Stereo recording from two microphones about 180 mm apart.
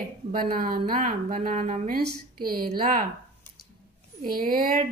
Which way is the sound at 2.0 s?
55° right (ahead or behind).